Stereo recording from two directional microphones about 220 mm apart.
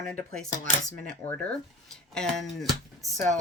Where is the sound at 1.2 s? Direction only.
10° left (ahead or behind).